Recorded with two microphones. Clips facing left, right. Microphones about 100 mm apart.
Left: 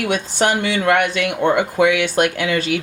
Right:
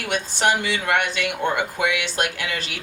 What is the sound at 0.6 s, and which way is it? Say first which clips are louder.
Speech: left 6 dB; 60° left (ahead or behind).